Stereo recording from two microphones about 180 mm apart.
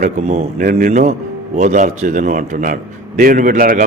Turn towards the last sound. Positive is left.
turn(degrees=-50)  # may be behind; listen again after turning